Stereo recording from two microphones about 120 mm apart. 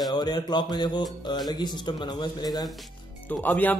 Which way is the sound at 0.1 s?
35° left (ahead or behind).